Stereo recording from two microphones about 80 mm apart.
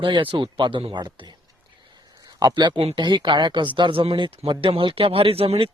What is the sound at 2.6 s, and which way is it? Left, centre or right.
Speech, right.